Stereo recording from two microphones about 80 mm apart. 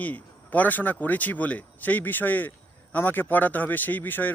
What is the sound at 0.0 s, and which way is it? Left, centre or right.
Speech, centre.